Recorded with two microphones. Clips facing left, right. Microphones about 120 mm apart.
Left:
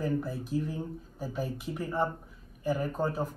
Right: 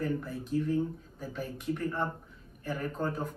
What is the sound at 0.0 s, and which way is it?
A man's voice, 5° left (ahead or behind).